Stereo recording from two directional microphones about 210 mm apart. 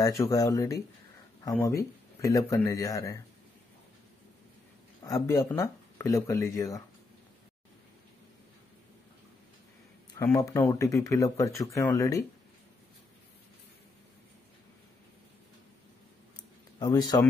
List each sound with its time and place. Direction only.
0.3 s speech: 15° left (ahead or behind)
5.0 s speech: 15° left (ahead or behind)
10.1 s speech: 15° left (ahead or behind)
16.8 s speech: 20° left (ahead or behind)